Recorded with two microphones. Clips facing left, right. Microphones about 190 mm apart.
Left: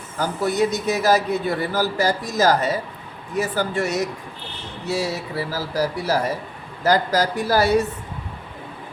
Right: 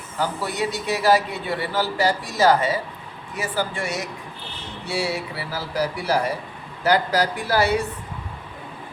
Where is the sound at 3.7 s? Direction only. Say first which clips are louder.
Left 6 dB; 40° left (ahead or behind).